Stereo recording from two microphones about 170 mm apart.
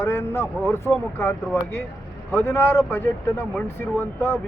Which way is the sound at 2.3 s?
15° left (ahead or behind).